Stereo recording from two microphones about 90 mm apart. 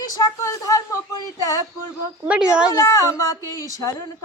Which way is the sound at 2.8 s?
35° left (ahead or behind).